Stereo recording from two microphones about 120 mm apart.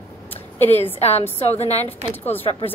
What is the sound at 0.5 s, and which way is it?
A woman's voice, 65° left (ahead or behind).